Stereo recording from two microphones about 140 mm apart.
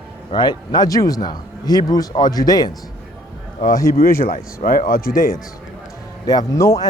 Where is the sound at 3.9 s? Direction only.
90° left.